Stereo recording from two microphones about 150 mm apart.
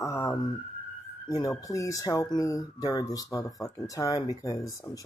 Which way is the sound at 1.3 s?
25° left (ahead or behind).